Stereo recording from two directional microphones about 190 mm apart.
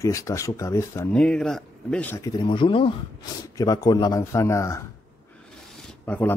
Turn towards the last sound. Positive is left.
turn(degrees=10)  # may be behind; listen again after turning